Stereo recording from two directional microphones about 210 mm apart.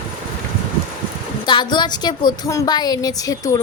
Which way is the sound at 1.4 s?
20° left (ahead or behind).